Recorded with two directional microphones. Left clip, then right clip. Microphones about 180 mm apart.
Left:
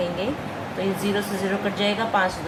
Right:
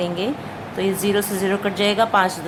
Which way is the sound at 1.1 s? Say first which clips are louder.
Right 4 dB; 40° right (ahead or behind).